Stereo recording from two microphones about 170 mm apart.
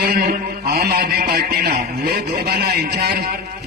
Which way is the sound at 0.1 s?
60° right (ahead or behind).